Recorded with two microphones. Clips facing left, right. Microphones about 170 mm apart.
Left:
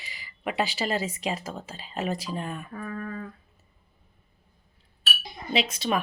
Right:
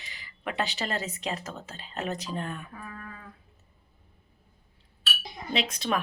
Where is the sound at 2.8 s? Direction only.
50° left (ahead or behind).